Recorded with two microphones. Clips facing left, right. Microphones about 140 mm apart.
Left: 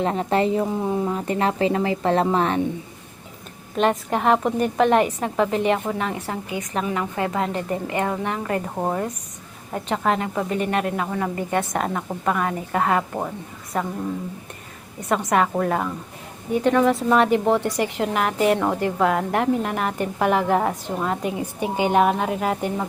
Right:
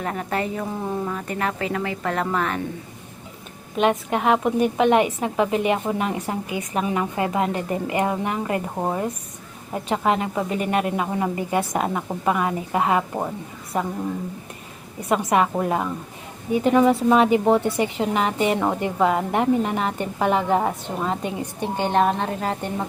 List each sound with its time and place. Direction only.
0.0 s speech: 25° left (ahead or behind)
0.7 s speech: 10° left (ahead or behind)
1.0 s speech: 25° left (ahead or behind)
3.8 s a woman's voice: 5° right (ahead or behind)
8.7 s a woman's voice: 5° right (ahead or behind)
15.1 s a woman's voice: 5° right (ahead or behind)